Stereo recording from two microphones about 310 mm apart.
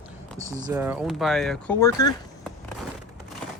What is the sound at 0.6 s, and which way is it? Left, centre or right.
Speech, centre.